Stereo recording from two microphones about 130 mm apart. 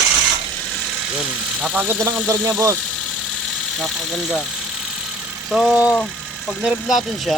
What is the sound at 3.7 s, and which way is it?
Speech, centre (ahead or behind).